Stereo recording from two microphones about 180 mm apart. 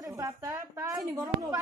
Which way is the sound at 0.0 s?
20° right (ahead or behind).